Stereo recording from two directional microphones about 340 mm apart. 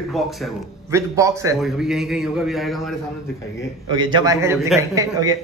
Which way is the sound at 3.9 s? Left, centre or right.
Centre.